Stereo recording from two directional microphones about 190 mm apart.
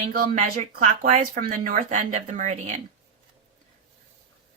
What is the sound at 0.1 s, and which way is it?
Speech, 45° right (ahead or behind).